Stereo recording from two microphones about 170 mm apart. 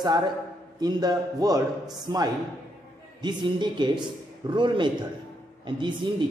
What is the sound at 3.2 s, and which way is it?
A man's voice, 25° right (ahead or behind).